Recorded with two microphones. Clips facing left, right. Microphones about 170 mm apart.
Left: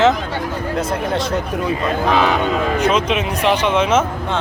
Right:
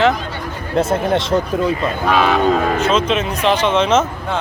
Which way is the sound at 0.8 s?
25° right (ahead or behind).